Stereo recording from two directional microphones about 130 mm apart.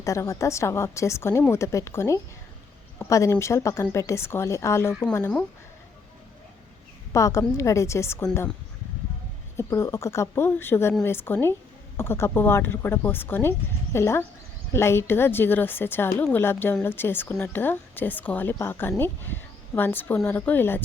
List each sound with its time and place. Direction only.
0.0 s speech: 25° left (ahead or behind)
7.1 s speech: 25° left (ahead or behind)
9.6 s a woman's voice: 20° left (ahead or behind)